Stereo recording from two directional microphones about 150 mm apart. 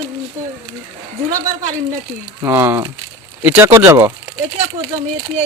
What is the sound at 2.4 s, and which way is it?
Speech, 15° right (ahead or behind).